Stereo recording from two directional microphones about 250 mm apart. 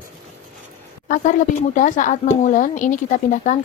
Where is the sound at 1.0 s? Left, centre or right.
Left.